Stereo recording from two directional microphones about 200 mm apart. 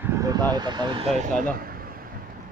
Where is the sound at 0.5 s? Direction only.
20° right (ahead or behind).